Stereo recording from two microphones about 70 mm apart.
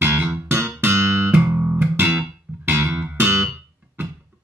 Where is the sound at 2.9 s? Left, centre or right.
Centre.